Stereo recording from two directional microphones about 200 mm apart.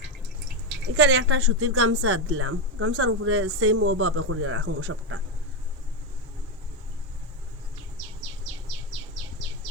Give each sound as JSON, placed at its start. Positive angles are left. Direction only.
{"t": 0.9, "sound": "speech", "side_deg": -60}